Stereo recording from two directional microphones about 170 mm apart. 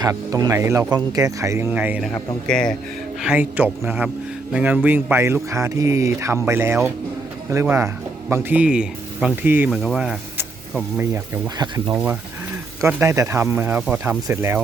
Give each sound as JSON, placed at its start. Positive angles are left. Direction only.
{"t": 0.0, "sound": "speech", "side_deg": -20}
{"t": 2.1, "sound": "speech", "side_deg": 5}
{"t": 3.2, "sound": "speech", "side_deg": -5}
{"t": 11.1, "sound": "speech", "side_deg": -25}